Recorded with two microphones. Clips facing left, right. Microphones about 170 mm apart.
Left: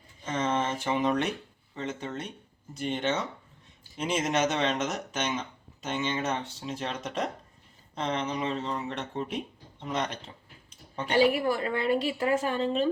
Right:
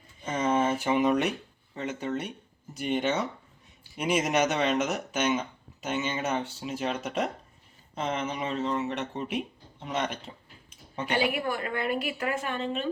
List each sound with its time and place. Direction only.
0.3 s a sound: 10° right (ahead or behind)
1.7 s speech: 10° right (ahead or behind)
11.1 s a woman's voice: 35° left (ahead or behind)